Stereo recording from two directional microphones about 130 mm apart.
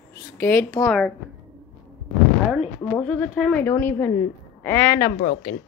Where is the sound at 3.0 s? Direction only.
10° left (ahead or behind).